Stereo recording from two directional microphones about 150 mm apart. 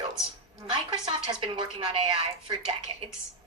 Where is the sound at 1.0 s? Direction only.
30° right (ahead or behind).